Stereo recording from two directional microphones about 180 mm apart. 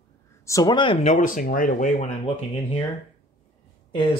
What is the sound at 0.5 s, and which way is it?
Speech, 20° left (ahead or behind).